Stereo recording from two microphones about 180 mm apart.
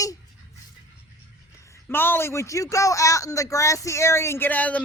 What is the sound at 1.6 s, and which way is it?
A man's voice, 15° left (ahead or behind).